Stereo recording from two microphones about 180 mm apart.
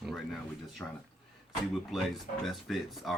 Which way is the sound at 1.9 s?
Centre (ahead or behind).